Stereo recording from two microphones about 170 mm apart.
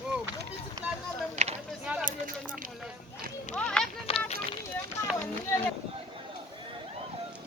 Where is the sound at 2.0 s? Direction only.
50° right (ahead or behind).